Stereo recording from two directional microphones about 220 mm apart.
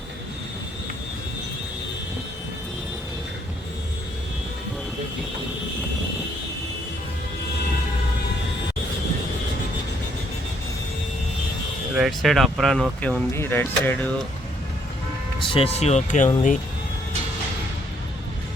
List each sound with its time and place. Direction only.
11.9 s speech: centre (ahead or behind)
15.4 s speech: 25° left (ahead or behind)